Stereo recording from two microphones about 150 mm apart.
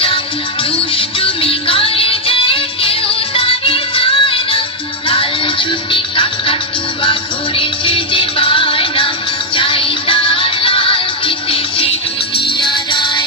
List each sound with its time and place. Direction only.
0.7 s music: 35° left (ahead or behind)